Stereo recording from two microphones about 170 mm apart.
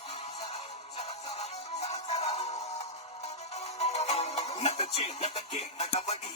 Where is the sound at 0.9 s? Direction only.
40° left (ahead or behind).